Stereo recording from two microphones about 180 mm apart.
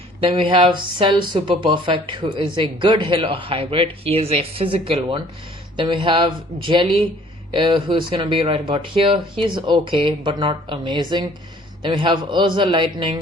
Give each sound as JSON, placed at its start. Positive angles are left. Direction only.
{"t": 0.3, "sound": "speech", "side_deg": -30}